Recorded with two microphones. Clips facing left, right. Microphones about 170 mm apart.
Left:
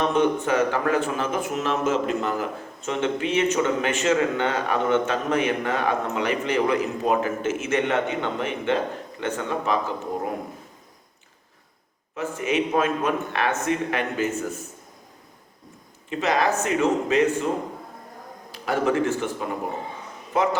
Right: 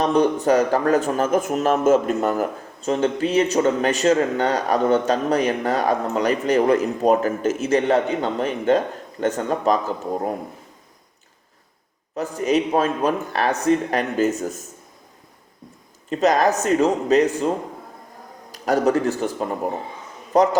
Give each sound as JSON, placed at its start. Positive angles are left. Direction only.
{"t": 0.0, "sound": "speech", "side_deg": -35}
{"t": 12.1, "sound": "speech", "side_deg": -40}
{"t": 16.0, "sound": "speech", "side_deg": -40}
{"t": 18.5, "sound": "speech", "side_deg": -40}
{"t": 20.3, "sound": "a man's voice", "side_deg": -40}